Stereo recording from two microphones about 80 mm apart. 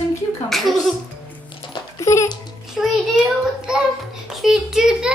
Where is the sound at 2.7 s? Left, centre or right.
Centre.